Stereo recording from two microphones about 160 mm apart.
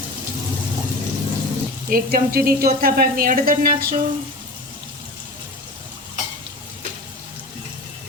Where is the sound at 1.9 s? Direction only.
65° right (ahead or behind).